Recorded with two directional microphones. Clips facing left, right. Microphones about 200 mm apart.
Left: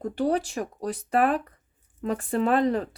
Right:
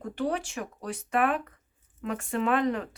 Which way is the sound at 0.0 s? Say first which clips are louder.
Left 5 dB; 35° left (ahead or behind).